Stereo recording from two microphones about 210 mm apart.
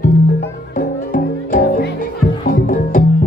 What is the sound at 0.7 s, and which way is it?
Music, 40° left (ahead or behind).